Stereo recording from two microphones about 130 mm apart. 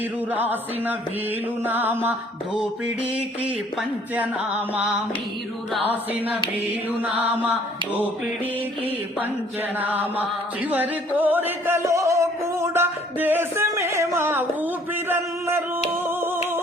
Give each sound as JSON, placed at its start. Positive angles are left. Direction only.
{"t": 0.3, "sound": "music", "side_deg": -15}
{"t": 6.7, "sound": "music", "side_deg": -10}
{"t": 9.7, "sound": "music", "side_deg": -15}
{"t": 16.0, "sound": "humming", "side_deg": -20}